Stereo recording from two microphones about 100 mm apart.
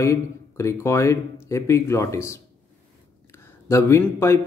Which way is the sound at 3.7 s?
30° left (ahead or behind).